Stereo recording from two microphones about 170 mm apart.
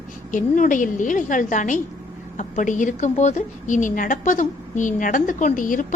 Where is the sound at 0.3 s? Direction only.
50° left (ahead or behind).